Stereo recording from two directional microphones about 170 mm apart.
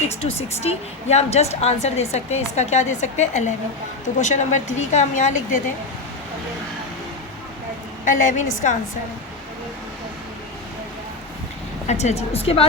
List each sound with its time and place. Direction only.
0.2 s a woman's voice: 35° left (ahead or behind)
8.0 s a woman's voice: 50° left (ahead or behind)
11.9 s a woman's voice: 40° left (ahead or behind)